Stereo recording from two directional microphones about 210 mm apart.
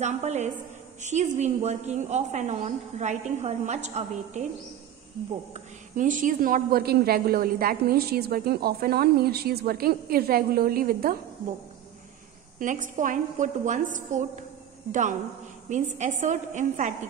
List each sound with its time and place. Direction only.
0.0 s a woman's voice: 35° right (ahead or behind)
5.5 s speech: 40° right (ahead or behind)
12.5 s a woman's voice: 40° right (ahead or behind)